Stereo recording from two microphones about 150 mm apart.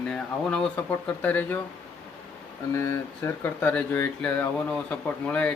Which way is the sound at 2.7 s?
15° left (ahead or behind).